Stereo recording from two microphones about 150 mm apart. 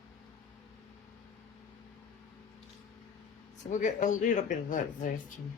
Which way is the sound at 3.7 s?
55° left (ahead or behind).